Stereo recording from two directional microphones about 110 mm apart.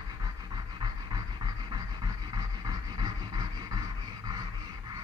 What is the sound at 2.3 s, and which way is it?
Vehicle, 40° right (ahead or behind).